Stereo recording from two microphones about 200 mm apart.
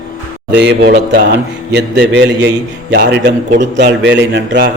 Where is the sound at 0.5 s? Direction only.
55° right (ahead or behind).